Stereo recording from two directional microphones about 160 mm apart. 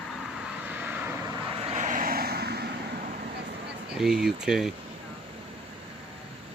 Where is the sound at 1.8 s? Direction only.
60° right (ahead or behind); by 2.8 s 90° right.